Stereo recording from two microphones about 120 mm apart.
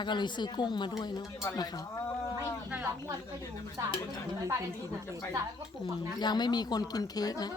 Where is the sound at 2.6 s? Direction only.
10° right (ahead or behind).